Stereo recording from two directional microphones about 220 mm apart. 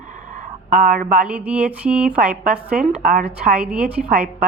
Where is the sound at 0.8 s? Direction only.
40° right (ahead or behind).